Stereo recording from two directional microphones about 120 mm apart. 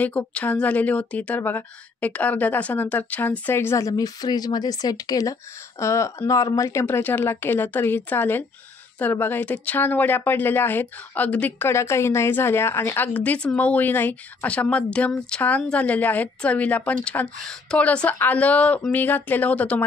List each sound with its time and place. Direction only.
0.0 s a woman's voice: 10° left (ahead or behind)